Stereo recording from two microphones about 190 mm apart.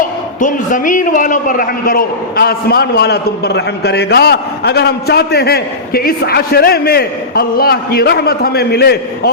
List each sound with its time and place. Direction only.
0.3 s a man's voice: 40° left (ahead or behind)